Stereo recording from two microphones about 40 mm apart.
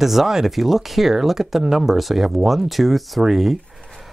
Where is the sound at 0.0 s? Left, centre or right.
Centre.